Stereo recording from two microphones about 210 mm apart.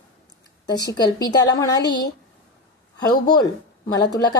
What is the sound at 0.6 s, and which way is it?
Speech, 20° left (ahead or behind).